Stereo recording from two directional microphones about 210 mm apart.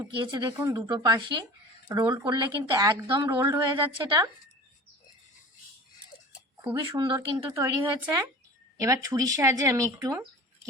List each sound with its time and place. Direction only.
0.0 s a woman's voice: 20° right (ahead or behind)
6.7 s a woman's voice: 20° right (ahead or behind)
8.8 s a woman's voice: 15° right (ahead or behind)